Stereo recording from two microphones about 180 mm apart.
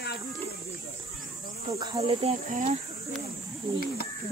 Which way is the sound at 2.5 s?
45° right (ahead or behind).